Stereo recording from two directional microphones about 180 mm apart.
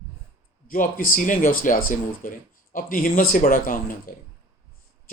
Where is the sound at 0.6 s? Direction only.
50° left (ahead or behind).